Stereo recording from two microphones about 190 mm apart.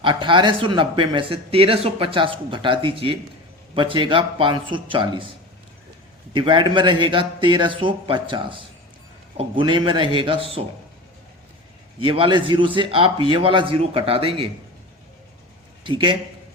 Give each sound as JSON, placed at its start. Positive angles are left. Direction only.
{"t": 0.0, "sound": "speech", "side_deg": -25}
{"t": 6.3, "sound": "speech", "side_deg": -25}
{"t": 12.0, "sound": "speech", "side_deg": -25}
{"t": 15.8, "sound": "a man's voice", "side_deg": -25}